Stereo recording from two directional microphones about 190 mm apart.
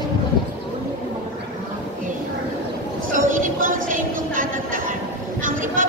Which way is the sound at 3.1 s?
45° right (ahead or behind).